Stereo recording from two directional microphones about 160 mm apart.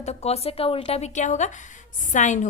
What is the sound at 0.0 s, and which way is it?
A woman's voice, 45° left (ahead or behind).